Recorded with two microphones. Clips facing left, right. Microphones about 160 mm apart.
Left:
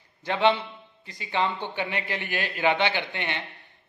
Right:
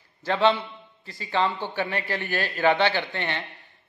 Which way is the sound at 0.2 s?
20° left (ahead or behind).